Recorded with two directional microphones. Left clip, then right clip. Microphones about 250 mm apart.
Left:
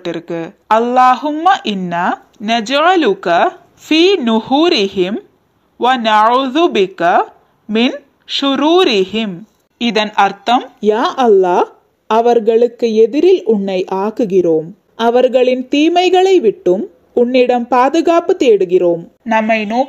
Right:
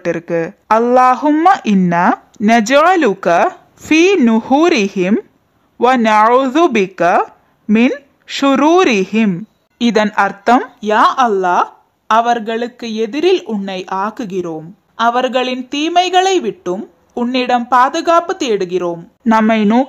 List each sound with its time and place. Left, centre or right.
0.0 s a woman's voice: right
10.8 s speech: centre
19.2 s speech: centre